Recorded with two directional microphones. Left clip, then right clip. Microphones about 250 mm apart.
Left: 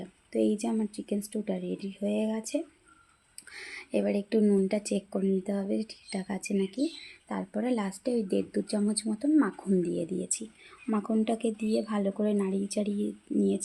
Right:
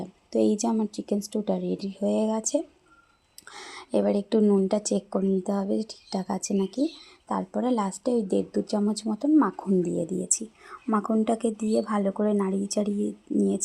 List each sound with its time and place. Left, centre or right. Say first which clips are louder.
0.0 s speech: right 4 dB; right